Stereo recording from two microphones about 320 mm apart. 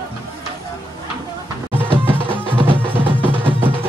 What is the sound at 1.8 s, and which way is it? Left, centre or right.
Music, centre.